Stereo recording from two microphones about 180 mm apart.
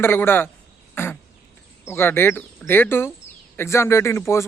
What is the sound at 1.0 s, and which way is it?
Duck, 10° left (ahead or behind).